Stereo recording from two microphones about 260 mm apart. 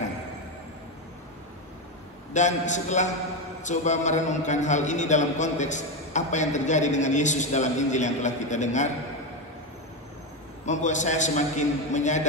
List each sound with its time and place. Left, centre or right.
2.3 s a man's voice: left
10.6 s a man's voice: left